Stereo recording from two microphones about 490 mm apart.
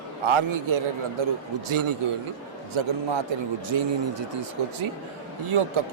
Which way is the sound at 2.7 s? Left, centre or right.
Right.